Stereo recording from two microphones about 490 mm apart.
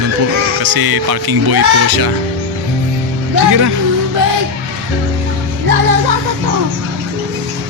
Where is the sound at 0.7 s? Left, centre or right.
Right.